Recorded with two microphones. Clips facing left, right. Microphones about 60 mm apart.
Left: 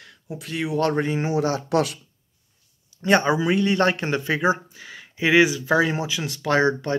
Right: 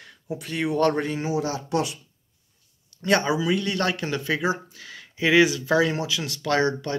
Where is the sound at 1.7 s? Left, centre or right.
Left.